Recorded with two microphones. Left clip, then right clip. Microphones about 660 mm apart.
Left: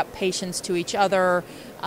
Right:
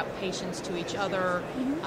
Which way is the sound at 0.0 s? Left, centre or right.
Left.